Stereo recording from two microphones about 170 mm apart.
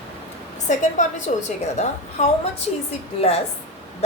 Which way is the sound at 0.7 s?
45° left (ahead or behind).